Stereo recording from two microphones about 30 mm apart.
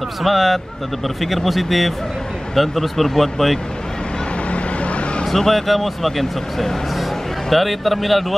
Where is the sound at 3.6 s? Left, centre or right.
Left.